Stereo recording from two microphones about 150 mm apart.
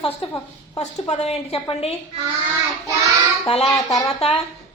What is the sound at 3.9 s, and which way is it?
Speech, 40° left (ahead or behind).